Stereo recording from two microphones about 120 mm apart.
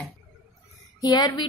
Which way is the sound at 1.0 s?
35° left (ahead or behind).